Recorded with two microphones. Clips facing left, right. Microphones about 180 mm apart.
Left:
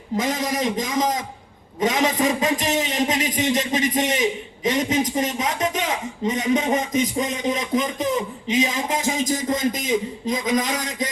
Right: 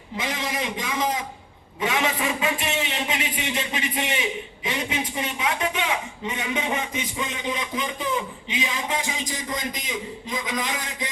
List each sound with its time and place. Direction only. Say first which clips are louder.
0.2 s a man's voice: left 5 dB; 45° left (ahead or behind)